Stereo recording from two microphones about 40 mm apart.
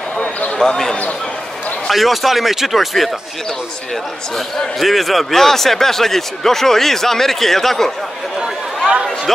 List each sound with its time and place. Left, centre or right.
0.2 s a sound: left
0.6 s a man's voice: centre
1.9 s speech: centre
4.6 s a man's voice: centre